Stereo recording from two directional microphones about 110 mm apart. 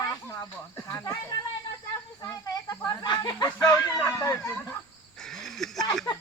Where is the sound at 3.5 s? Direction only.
25° left (ahead or behind).